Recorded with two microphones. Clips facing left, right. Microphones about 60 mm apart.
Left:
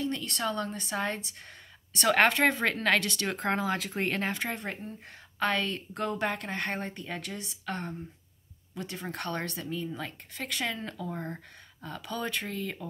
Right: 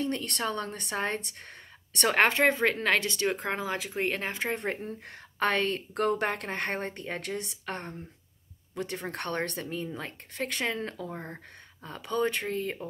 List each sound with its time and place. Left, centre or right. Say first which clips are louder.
0.0 s speech: right 1 dB; right
2.0 s speech: even; right
4.4 s speech: right 3 dB; right
4.8 s a woman's voice: right 3 dB; right